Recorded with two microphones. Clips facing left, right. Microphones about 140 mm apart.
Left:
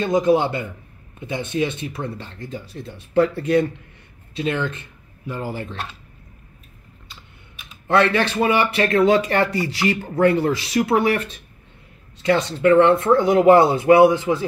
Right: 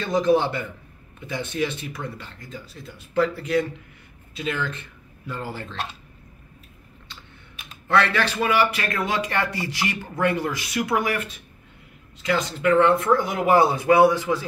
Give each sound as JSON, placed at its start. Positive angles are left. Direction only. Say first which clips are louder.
{"t": 0.0, "sound": "a man's voice", "louder": "left 3 dB", "side_deg": 15}
{"t": 7.9, "sound": "speech", "louder": "left 4 dB", "side_deg": 20}